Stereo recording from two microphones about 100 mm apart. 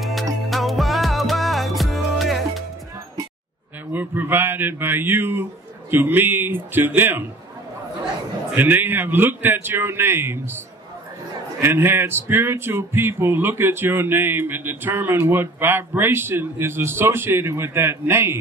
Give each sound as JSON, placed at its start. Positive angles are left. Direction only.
{"t": 0.0, "sound": "music", "side_deg": 0}
{"t": 3.9, "sound": "a man's voice", "side_deg": -20}
{"t": 8.5, "sound": "a man's voice", "side_deg": -20}
{"t": 11.6, "sound": "a man's voice", "side_deg": -25}